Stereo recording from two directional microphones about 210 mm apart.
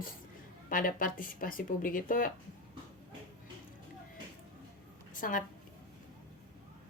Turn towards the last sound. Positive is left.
turn(degrees=40)  # may be behind; listen again after turning